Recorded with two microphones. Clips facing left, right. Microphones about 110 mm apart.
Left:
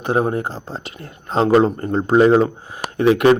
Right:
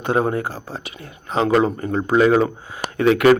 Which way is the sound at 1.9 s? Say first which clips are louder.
Left 3 dB; 30° left (ahead or behind).